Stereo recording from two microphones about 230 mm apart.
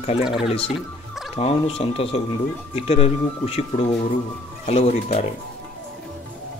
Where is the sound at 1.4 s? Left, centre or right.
Left.